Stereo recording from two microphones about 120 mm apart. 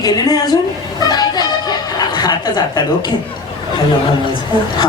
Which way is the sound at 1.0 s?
35° left (ahead or behind).